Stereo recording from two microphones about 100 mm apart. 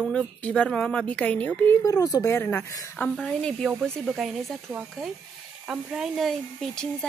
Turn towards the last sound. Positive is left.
turn(degrees=5)  # may be behind; listen again after turning